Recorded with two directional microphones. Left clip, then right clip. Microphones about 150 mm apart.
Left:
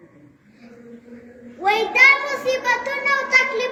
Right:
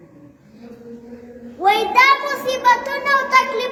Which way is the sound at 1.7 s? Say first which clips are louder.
Right 1 dB; 30° right (ahead or behind).